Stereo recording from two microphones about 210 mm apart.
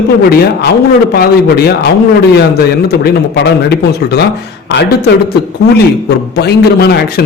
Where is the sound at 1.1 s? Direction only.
45° left (ahead or behind).